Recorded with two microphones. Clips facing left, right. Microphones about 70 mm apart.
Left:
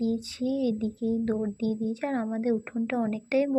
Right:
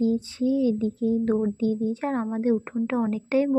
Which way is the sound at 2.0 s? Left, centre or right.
Right.